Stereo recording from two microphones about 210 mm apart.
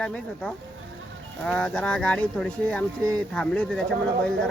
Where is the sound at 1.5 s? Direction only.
5° left (ahead or behind).